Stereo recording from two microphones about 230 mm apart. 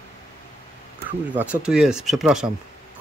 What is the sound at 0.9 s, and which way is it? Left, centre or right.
Speech, centre.